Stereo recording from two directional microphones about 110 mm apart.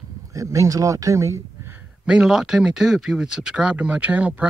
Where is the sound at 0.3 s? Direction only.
30° right (ahead or behind).